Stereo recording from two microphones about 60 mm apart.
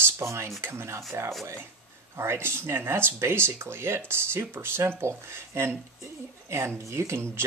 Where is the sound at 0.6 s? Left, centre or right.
Right.